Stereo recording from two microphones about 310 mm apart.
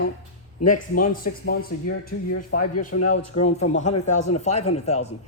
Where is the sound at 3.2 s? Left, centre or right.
Left.